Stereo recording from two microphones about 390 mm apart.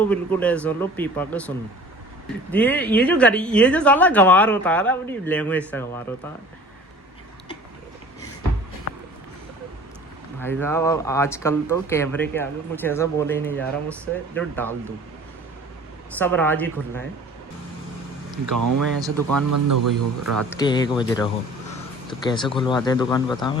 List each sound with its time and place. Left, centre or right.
0.0 s speech: centre
10.4 s speech: centre
16.1 s speech: centre
18.4 s speech: right
18.9 s speech: centre
19.3 s speech: right
20.5 s speech: centre
22.3 s speech: centre